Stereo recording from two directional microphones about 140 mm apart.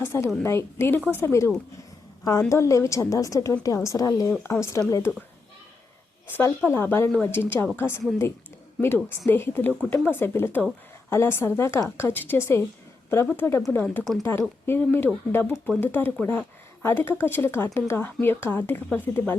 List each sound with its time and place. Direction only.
0.0 s a woman's voice: 15° left (ahead or behind)
6.2 s speech: 15° left (ahead or behind)